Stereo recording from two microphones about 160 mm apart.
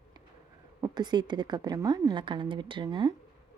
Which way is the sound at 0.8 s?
25° right (ahead or behind).